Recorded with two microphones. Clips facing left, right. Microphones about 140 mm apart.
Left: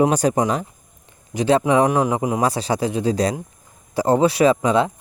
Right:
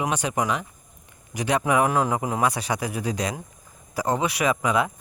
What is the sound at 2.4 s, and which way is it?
Speech, 30° left (ahead or behind).